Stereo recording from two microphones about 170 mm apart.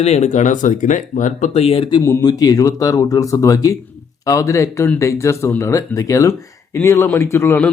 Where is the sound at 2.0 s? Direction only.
15° left (ahead or behind).